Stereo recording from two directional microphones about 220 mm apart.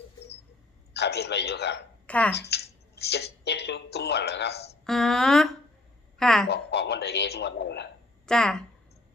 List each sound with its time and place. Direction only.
0.9 s a man's voice: 50° left (ahead or behind)
2.0 s speech: 5° left (ahead or behind)
2.3 s a man's voice: 50° left (ahead or behind)
4.9 s speech: centre (ahead or behind)
6.5 s a man's voice: 50° left (ahead or behind)
8.3 s speech: 5° left (ahead or behind)